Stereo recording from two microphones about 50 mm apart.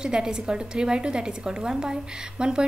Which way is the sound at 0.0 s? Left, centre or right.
Centre.